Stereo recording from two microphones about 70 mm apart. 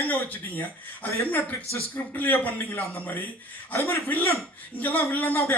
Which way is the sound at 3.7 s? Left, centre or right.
Left.